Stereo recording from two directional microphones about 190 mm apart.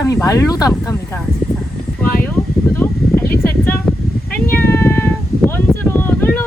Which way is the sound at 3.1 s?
5° right (ahead or behind).